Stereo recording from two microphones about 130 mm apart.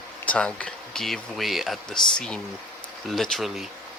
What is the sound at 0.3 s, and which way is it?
Speech, 10° left (ahead or behind).